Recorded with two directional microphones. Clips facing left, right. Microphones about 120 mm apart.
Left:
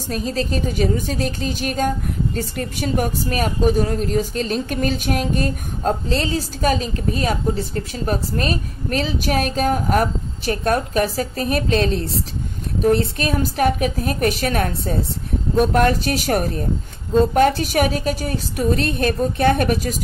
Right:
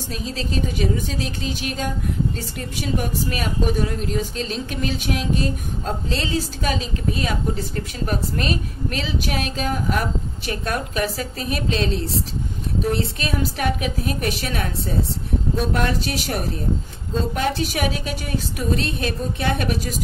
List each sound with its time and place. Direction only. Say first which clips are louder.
0.1 s a woman's voice: left 5 dB; 45° left (ahead or behind)